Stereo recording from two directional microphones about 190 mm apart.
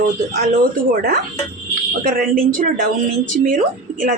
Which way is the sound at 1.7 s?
45° right (ahead or behind).